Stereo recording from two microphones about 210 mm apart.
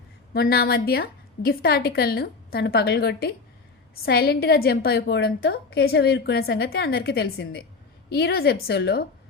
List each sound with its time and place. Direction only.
0.3 s a woman's voice: 45° left (ahead or behind)